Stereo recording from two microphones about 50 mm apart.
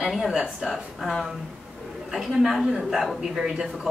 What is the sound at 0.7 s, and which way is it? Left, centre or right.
Speech, centre.